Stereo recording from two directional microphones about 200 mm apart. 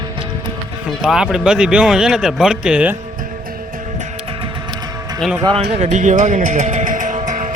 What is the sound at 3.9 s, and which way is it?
Music, 30° right (ahead or behind).